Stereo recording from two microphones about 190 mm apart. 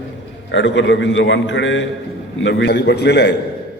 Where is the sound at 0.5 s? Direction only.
75° left (ahead or behind).